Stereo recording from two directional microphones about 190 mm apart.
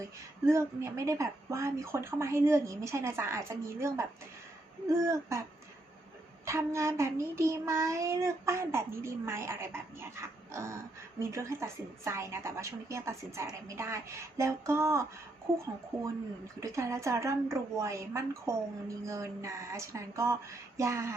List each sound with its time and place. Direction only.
0.0 s child singing: 15° right (ahead or behind)
6.4 s child singing: 15° right (ahead or behind)
16.6 s child singing: 15° right (ahead or behind)